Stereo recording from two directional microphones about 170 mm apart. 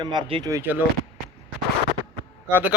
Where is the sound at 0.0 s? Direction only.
25° right (ahead or behind).